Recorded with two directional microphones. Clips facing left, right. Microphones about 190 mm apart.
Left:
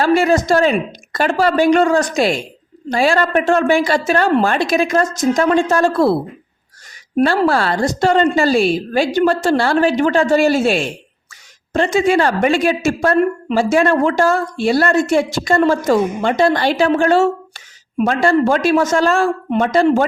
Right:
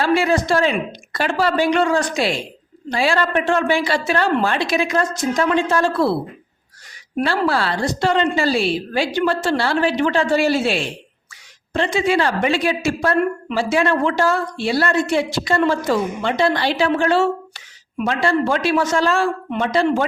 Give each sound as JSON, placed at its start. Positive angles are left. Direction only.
{"t": 0.0, "sound": "a woman's voice", "side_deg": 45}
{"t": 7.2, "sound": "a woman's voice", "side_deg": 45}